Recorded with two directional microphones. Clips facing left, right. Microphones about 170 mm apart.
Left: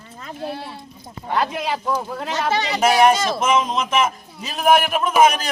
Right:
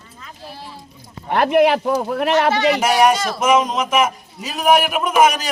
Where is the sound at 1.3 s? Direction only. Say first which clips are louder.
Right 8 dB; 65° right (ahead or behind).